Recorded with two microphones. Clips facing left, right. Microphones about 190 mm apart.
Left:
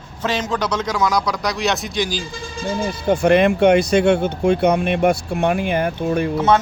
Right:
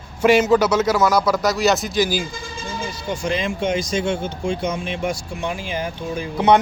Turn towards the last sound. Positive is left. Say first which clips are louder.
# left 7 dB
turn(degrees=60)  # may be behind; listen again after turning